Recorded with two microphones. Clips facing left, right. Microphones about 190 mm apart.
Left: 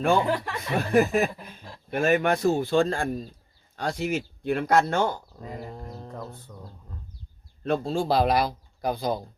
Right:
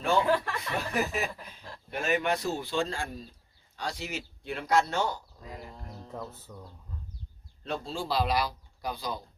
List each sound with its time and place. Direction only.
0.3 s speech: 15° left (ahead or behind)
0.8 s speech: 50° left (ahead or behind)
6.5 s speech: centre (ahead or behind)
7.6 s speech: 55° left (ahead or behind)